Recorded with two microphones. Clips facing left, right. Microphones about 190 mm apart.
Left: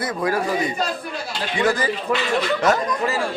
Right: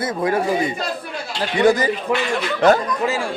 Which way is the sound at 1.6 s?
20° right (ahead or behind).